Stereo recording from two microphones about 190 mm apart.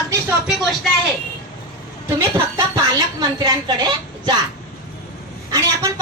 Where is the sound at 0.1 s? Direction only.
10° right (ahead or behind).